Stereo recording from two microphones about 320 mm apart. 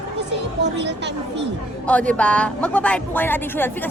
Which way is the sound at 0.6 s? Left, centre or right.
Right.